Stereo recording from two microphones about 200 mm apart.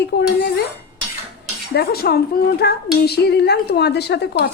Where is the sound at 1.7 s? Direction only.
50° left (ahead or behind).